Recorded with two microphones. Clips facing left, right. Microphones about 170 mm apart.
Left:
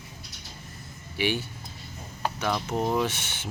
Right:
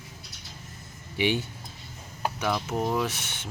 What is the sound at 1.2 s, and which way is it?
Speech, 20° right (ahead or behind).